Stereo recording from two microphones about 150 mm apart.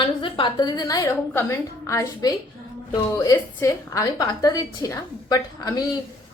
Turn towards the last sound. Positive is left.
turn(degrees=25)  # may be behind; listen again after turning